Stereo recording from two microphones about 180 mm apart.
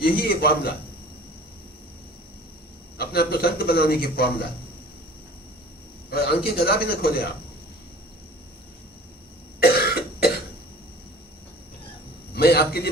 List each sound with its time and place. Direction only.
0.0 s a man's voice: 55° left (ahead or behind)
3.0 s a man's voice: 60° left (ahead or behind)
6.1 s a man's voice: 60° left (ahead or behind)
9.6 s cough: 60° left (ahead or behind)
12.3 s a man's voice: 60° left (ahead or behind)